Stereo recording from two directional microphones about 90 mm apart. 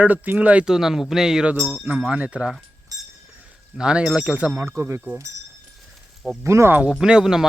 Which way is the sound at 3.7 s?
10° right (ahead or behind).